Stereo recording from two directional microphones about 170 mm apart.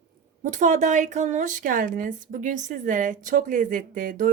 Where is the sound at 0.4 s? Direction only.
45° right (ahead or behind).